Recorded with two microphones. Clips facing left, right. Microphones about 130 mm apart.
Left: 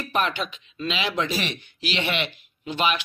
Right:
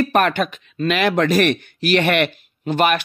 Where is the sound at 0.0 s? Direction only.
55° right (ahead or behind).